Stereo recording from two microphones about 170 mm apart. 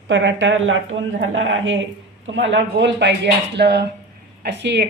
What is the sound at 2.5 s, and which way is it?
Speech, 90° right.